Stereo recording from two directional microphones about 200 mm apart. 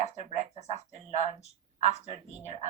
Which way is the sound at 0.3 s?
35° left (ahead or behind).